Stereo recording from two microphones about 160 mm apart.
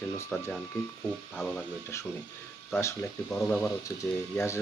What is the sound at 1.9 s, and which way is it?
Speech, 20° left (ahead or behind).